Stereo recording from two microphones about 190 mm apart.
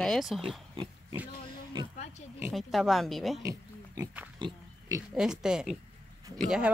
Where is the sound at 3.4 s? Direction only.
15° right (ahead or behind).